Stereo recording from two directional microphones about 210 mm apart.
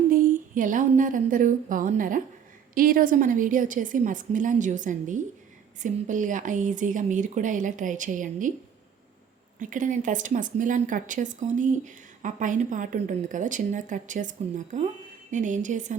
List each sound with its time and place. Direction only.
0.1 s speech: 40° right (ahead or behind)
9.6 s speech: 40° right (ahead or behind)